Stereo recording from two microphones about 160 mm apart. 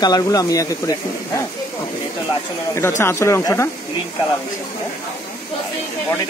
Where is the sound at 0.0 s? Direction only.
25° left (ahead or behind).